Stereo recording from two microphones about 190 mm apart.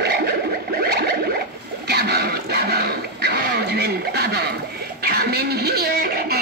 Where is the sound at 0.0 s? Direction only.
60° right (ahead or behind).